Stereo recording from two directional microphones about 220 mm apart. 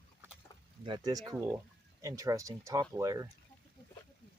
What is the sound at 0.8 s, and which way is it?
Speech, 20° right (ahead or behind).